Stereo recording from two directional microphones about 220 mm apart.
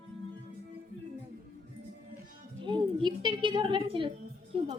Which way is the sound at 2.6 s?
20° right (ahead or behind).